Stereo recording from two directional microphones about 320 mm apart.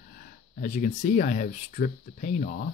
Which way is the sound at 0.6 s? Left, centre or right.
Left.